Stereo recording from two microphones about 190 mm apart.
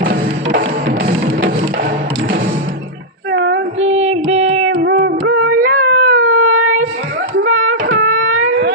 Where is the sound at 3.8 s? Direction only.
35° right (ahead or behind).